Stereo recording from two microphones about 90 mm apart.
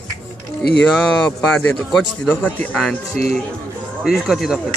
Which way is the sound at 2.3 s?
20° left (ahead or behind).